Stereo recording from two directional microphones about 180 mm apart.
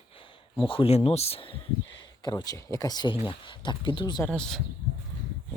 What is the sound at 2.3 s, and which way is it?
Speech, 15° left (ahead or behind).